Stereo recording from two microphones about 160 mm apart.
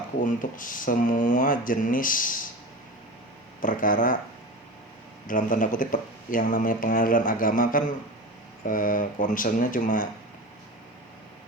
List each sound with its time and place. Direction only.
0.2 s speech: 55° left (ahead or behind)
3.6 s speech: 55° left (ahead or behind)
5.2 s speech: 55° left (ahead or behind)